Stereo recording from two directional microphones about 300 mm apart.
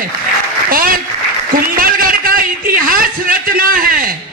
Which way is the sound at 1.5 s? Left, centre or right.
Right.